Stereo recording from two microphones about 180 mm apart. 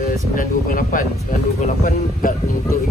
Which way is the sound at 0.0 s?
50° left (ahead or behind).